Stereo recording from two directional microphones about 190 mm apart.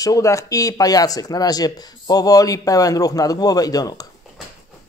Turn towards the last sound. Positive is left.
turn(degrees=20)  # may be behind; listen again after turning